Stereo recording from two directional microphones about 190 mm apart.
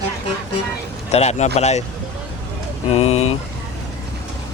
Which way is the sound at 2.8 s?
30° left (ahead or behind).